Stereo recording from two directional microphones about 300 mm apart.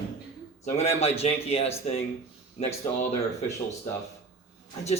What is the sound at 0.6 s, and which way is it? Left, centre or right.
A man's voice, left.